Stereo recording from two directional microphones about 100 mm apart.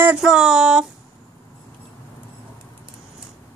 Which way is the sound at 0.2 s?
5° right (ahead or behind).